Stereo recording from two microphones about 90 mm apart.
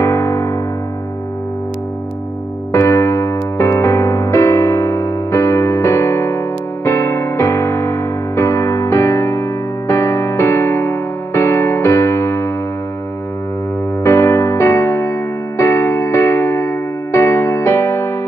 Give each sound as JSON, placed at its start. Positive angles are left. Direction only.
{"t": 0.0, "sound": "music", "side_deg": 35}
{"t": 2.7, "sound": "music", "side_deg": 30}
{"t": 14.0, "sound": "music", "side_deg": 30}